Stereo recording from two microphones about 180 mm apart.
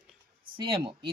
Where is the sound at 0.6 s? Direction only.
25° right (ahead or behind).